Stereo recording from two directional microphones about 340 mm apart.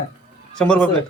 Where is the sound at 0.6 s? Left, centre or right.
Centre.